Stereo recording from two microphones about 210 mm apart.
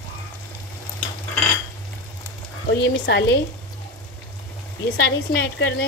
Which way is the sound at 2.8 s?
55° left (ahead or behind).